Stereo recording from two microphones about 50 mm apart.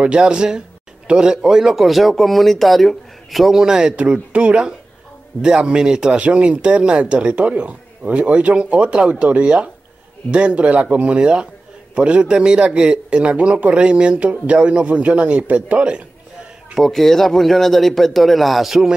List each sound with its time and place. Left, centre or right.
0.0 s speech: centre
3.6 s speech: centre
3.9 s speech: right
16.7 s speech: centre